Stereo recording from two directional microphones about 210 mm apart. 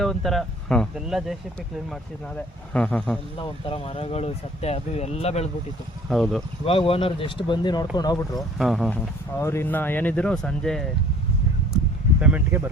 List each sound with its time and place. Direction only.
0.0 s speech: centre (ahead or behind)
3.3 s speech: 25° left (ahead or behind)
6.1 s speech: centre (ahead or behind)
6.7 s speech: 25° left (ahead or behind)
8.4 s speech: centre (ahead or behind)
9.4 s speech: 10° left (ahead or behind)
12.2 s speech: 10° right (ahead or behind)